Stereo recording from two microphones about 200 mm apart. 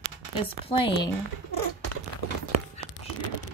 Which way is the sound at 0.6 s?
25° left (ahead or behind).